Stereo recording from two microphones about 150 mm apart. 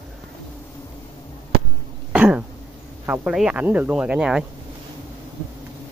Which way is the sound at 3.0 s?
10° right (ahead or behind).